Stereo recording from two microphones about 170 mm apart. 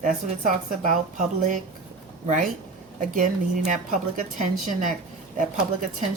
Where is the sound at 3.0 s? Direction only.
55° right (ahead or behind).